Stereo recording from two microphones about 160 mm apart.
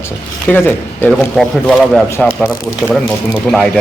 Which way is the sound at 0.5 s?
10° left (ahead or behind).